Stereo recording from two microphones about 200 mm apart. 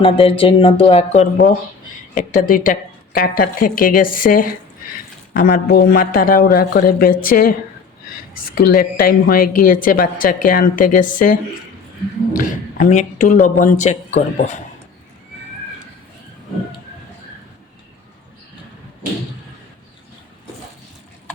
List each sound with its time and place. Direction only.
0.0 s speech: 25° left (ahead or behind)
2.1 s speech: 45° left (ahead or behind)
8.5 s speech: 45° left (ahead or behind)